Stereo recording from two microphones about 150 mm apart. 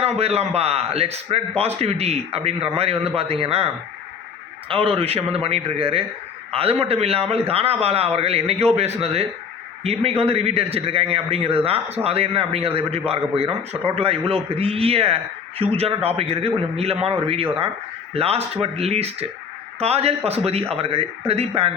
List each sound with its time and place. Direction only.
0.0 s a man's voice: 45° right (ahead or behind)
4.7 s a man's voice: 40° right (ahead or behind)